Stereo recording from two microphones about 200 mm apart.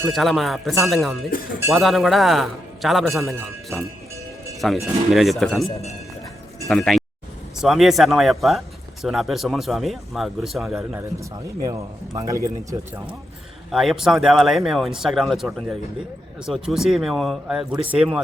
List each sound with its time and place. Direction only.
0.1 s speech: centre (ahead or behind)
5.6 s a man's voice: 30° left (ahead or behind)
6.7 s speech: centre (ahead or behind)
11.2 s speech: 20° right (ahead or behind)
13.7 s speech: centre (ahead or behind)